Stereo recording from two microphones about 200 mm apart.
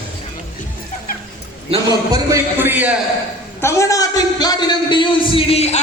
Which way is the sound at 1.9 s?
15° right (ahead or behind).